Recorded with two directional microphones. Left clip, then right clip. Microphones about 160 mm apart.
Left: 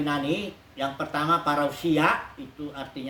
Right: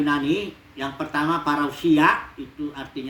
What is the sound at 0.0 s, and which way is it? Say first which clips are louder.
Speech: right 5 dB; 15° left (ahead or behind).